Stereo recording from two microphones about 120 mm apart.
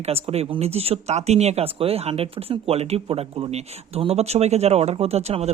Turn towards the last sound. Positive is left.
turn(degrees=-60)  # may be behind; listen again after turning